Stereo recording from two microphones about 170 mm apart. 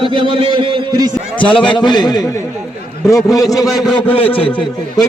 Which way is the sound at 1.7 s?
25° left (ahead or behind).